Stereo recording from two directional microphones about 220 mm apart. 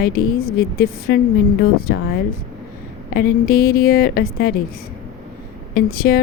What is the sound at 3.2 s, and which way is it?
A woman's voice, 40° left (ahead or behind).